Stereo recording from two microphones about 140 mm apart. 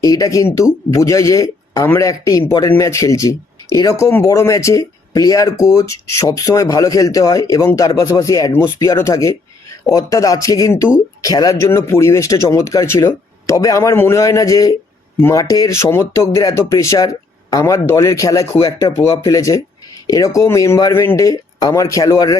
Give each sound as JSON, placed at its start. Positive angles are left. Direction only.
{"t": 0.0, "sound": "speech", "side_deg": 25}